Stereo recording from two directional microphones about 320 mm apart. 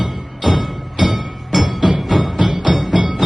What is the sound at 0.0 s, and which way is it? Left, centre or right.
Music, centre.